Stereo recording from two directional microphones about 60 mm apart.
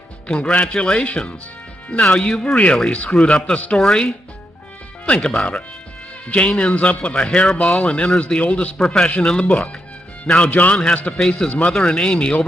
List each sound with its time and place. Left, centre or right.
0.3 s a man's voice: centre
10.5 s a man's voice: left